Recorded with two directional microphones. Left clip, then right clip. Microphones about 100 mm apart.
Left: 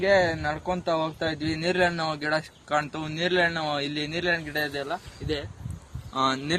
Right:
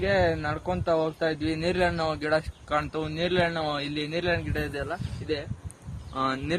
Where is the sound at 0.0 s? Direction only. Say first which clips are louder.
Left 3 dB; 5° right (ahead or behind).